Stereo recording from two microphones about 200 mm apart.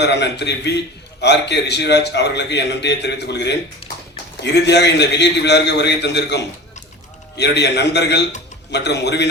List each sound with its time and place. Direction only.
0.0 s a man's voice: 60° left (ahead or behind)